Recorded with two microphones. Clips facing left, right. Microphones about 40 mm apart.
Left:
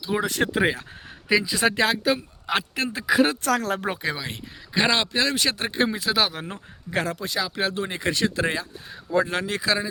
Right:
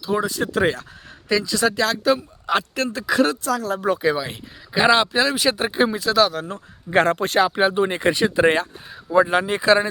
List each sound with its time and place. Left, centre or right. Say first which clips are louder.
0.3 s speech: even; left
0.5 s a man's voice: right 2 dB; centre
2.0 s a man's voice: right 4 dB; centre
3.4 s speech: even; left
4.0 s speech: right 7 dB; centre
6.9 s a man's voice: right 9 dB; right
7.5 s speech: right 8 dB; right